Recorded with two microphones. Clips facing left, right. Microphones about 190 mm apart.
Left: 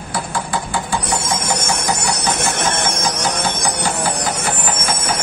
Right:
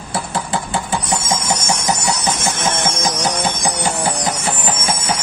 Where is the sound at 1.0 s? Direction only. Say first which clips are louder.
Right 1 dB; 60° left (ahead or behind).